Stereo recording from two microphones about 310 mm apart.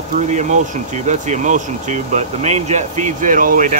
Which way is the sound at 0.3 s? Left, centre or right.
Right.